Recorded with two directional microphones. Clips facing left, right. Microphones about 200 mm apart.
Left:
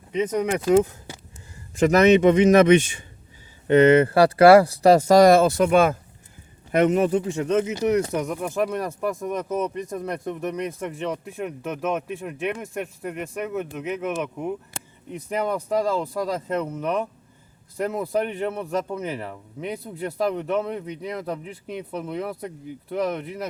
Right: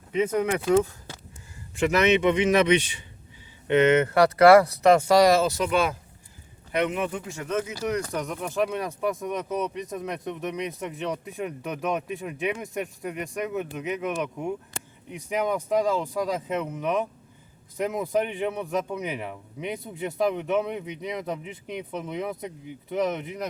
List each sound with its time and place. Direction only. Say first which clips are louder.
0.1 s speech: left 1 dB; 5° right (ahead or behind)
0.7 s a sound: left 5 dB; 15° left (ahead or behind)
1.7 s a man's voice: left 5 dB; 40° left (ahead or behind)
3.7 s speech: left 5 dB; 35° left (ahead or behind)
8.2 s speech: left 2 dB; 5° left (ahead or behind)
15.1 s speech: left 1 dB; 15° right (ahead or behind)
16.2 s speech: left 2 dB; centre (ahead or behind)
18.0 s speech: even; centre (ahead or behind)
18.9 s speech: left 2 dB; 15° right (ahead or behind)
20.6 s speech: left 1 dB; 10° right (ahead or behind)
21.7 s speech: left 2 dB; 5° left (ahead or behind)